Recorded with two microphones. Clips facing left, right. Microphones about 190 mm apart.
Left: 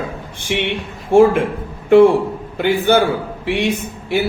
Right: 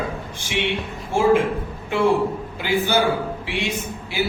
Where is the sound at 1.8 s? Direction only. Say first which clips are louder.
Left 9 dB; 60° left (ahead or behind).